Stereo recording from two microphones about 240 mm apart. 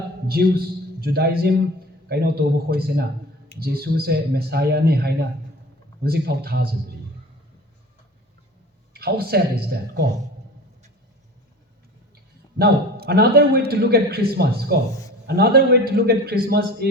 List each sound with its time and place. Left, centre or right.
0.3 s a man's voice: right
8.9 s a man's voice: right
12.5 s a man's voice: right